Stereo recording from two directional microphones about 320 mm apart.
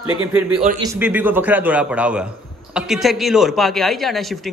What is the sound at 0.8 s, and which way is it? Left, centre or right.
A man's voice, centre.